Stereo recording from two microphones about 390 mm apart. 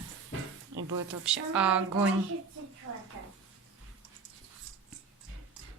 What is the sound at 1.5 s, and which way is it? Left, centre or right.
Speech, centre.